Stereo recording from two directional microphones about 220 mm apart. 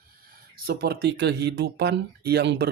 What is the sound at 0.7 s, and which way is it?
Speech, 45° right (ahead or behind).